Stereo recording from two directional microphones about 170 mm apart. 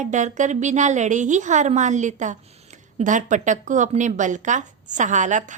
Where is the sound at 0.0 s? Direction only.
45° right (ahead or behind).